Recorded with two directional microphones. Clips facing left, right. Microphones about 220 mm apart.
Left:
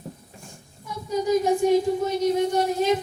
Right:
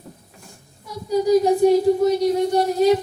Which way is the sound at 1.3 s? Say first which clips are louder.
Right 4 dB; 35° right (ahead or behind).